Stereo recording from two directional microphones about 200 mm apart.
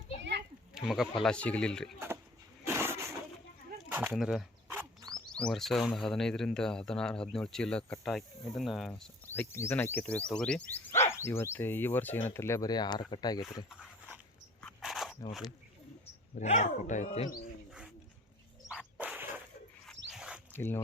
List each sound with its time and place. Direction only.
0.2 s children playing: 60° right (ahead or behind)
0.7 s sheep: centre (ahead or behind)
1.2 s speech: 5° left (ahead or behind)
2.6 s a sound: 10° right (ahead or behind)
4.1 s a sound: centre (ahead or behind)
5.1 s speech: 5° left (ahead or behind); by 13.4 s 20° left (ahead or behind)
13.7 s dog: 5° right (ahead or behind)
14.6 s a sound: centre (ahead or behind)
16.3 s speech: 35° left (ahead or behind)
17.7 s dog: 5° right (ahead or behind)
18.7 s a sound: 5° right (ahead or behind)
20.1 s zipper: 5° right (ahead or behind)
20.5 s speech: 10° left (ahead or behind)